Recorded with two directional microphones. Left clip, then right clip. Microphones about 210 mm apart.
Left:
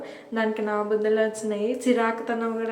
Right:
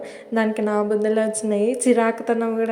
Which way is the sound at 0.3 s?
40° right (ahead or behind).